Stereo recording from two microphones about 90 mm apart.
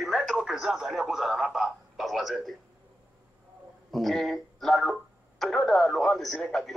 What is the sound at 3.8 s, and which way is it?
Speech, centre (ahead or behind).